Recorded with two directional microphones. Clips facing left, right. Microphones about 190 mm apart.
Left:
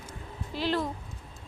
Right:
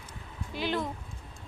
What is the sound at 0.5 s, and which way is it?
Speech, centre (ahead or behind).